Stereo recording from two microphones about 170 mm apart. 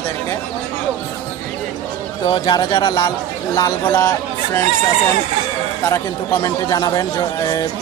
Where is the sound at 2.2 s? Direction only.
25° left (ahead or behind).